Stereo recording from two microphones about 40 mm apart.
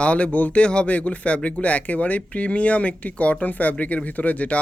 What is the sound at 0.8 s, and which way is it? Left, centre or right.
Speech, left.